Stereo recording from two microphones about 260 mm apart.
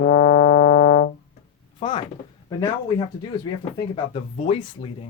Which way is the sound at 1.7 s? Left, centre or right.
Centre.